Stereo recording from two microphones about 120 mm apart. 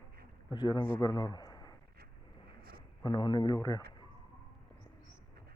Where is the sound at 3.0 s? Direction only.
40° left (ahead or behind).